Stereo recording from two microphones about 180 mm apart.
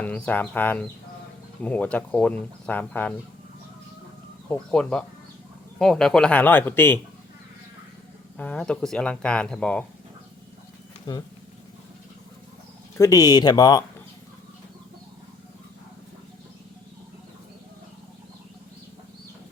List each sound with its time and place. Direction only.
0.0 s speech: 10° left (ahead or behind)
4.4 s speech: 5° left (ahead or behind)
8.4 s speech: 5° left (ahead or behind)
13.0 s speech: 20° left (ahead or behind)